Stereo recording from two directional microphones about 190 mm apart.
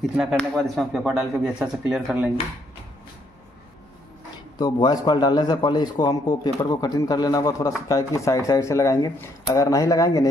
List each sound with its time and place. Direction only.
0.1 s speech: centre (ahead or behind)
4.6 s a man's voice: 20° left (ahead or behind)